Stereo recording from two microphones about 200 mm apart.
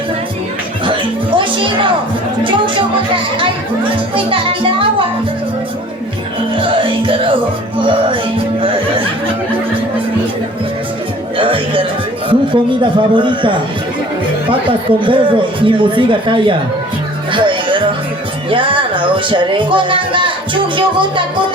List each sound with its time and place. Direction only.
1.4 s music: 25° right (ahead or behind)
4.1 s speech: 25° right (ahead or behind)
6.6 s music: 25° right (ahead or behind)
11.3 s music: 25° right (ahead or behind)
12.3 s speech: 25° right (ahead or behind)
14.7 s speech: 25° right (ahead or behind)
17.3 s music: 25° right (ahead or behind)
18.5 s a sound: 25° right (ahead or behind)